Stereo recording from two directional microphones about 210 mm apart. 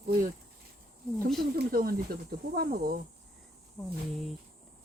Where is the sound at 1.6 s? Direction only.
45° right (ahead or behind).